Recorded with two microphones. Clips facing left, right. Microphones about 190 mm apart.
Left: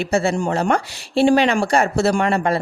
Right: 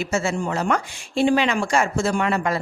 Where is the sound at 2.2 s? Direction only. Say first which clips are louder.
Left 4 dB; 35° left (ahead or behind).